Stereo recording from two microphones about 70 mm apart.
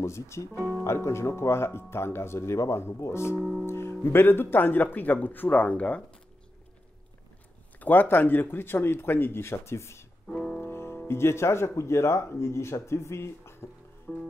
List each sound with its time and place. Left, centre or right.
0.0 s speech: left
3.3 s music: centre
3.6 s speech: left; by 6.0 s centre
7.8 s speech: left
10.2 s music: centre
10.6 s music: left
11.1 s speech: left
14.1 s music: centre